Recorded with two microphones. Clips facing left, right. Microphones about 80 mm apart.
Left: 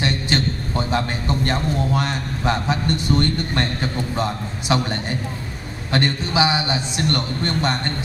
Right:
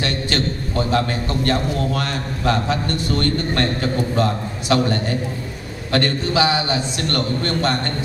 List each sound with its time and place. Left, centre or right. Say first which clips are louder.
0.0 s a man's voice: even; left